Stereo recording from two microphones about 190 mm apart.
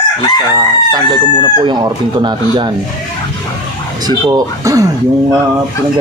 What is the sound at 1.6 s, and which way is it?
Speech, 25° right (ahead or behind).